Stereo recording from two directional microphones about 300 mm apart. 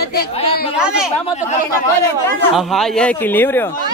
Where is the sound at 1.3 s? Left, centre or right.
Left.